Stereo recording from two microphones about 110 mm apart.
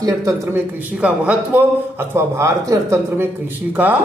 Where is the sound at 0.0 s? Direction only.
30° right (ahead or behind).